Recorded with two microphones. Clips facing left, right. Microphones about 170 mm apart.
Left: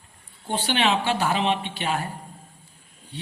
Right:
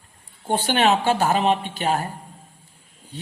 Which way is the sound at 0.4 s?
45° right (ahead or behind).